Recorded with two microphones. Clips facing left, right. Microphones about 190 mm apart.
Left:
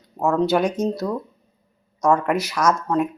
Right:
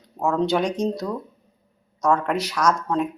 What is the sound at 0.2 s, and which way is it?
Speech, 5° left (ahead or behind).